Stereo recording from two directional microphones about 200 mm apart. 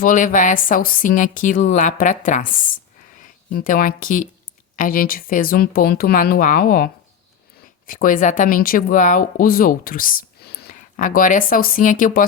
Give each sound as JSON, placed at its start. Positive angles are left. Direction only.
{"t": 0.0, "sound": "speech", "side_deg": 40}